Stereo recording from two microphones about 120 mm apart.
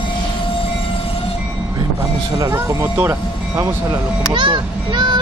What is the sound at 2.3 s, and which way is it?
A child's voice, 30° right (ahead or behind).